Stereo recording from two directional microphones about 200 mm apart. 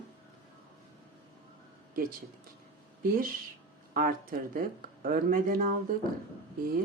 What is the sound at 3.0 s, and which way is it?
Speech, 45° right (ahead or behind).